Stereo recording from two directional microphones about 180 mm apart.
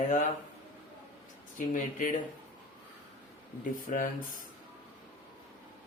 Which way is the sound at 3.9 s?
45° left (ahead or behind).